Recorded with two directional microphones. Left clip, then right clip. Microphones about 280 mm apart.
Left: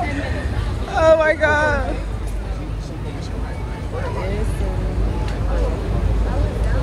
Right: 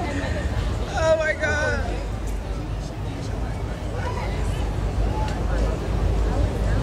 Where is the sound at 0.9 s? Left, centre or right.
Centre.